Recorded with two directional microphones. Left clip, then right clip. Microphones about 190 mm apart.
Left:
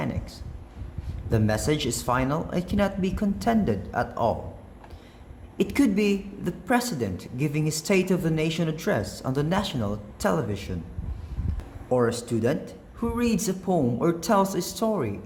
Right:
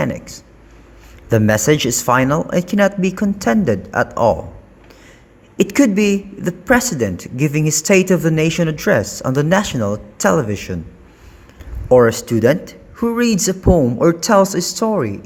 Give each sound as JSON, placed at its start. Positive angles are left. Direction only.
{"t": 0.0, "sound": "a woman's voice", "side_deg": -40}
{"t": 5.5, "sound": "a woman's voice", "side_deg": -40}
{"t": 11.9, "sound": "a woman's voice", "side_deg": -45}